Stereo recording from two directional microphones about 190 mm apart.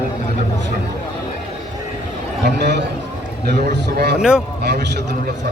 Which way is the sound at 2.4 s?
65° right (ahead or behind).